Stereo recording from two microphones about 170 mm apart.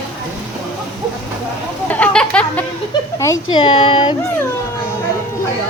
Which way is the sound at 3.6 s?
30° left (ahead or behind).